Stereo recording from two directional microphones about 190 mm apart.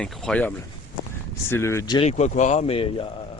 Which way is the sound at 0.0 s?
5° left (ahead or behind).